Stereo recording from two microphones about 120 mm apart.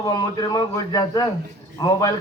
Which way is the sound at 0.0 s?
30° left (ahead or behind).